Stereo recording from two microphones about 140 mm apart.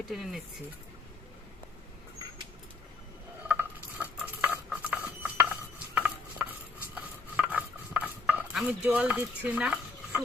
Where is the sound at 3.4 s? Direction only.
10° right (ahead or behind).